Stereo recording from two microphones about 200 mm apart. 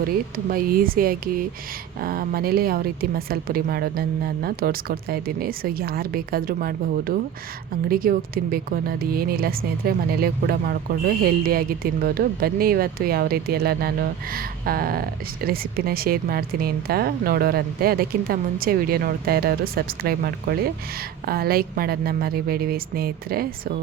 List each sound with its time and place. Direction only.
0.0 s speech: 45° right (ahead or behind)